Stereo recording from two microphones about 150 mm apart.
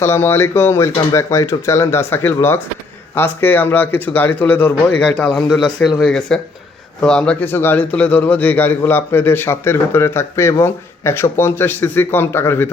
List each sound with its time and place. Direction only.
0.0 s a man's voice: 15° left (ahead or behind)